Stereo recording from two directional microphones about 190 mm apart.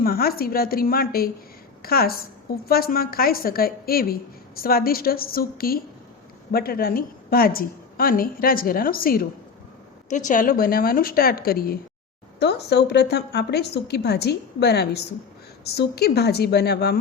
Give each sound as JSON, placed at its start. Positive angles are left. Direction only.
{"t": 0.0, "sound": "a woman's voice", "side_deg": 50}